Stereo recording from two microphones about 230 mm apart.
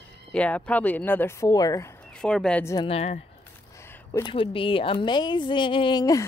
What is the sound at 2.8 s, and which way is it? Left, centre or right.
Speech, left.